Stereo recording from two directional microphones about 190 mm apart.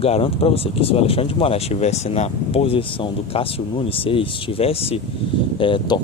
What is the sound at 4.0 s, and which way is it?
Speech, 30° left (ahead or behind).